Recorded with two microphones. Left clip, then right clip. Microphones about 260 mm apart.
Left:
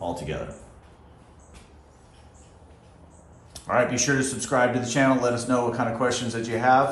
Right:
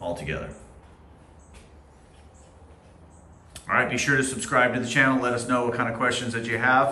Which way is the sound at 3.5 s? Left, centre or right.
Centre.